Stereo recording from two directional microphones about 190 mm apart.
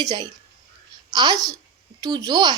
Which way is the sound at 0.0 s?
20° right (ahead or behind).